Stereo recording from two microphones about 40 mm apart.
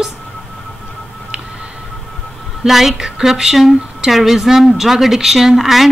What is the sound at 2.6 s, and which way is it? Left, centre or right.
A woman's voice, centre.